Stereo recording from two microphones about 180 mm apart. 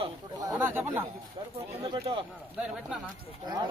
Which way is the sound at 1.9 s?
30° right (ahead or behind).